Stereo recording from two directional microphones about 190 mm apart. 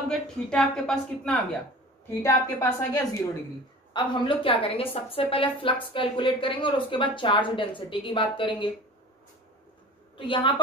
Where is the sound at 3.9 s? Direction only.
25° left (ahead or behind).